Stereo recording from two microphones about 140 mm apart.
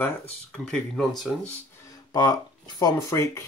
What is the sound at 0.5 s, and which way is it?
Speech, 5° left (ahead or behind).